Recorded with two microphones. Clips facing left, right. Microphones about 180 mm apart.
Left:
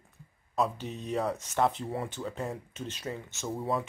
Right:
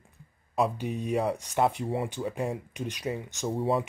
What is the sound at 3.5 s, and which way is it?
Speech, 30° right (ahead or behind).